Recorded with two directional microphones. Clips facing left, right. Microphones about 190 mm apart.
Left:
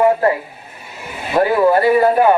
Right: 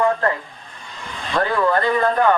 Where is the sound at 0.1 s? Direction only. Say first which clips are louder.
Left 6 dB; 15° left (ahead or behind).